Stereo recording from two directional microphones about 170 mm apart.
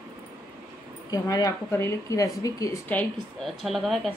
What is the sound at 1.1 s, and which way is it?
A woman's voice, 20° left (ahead or behind).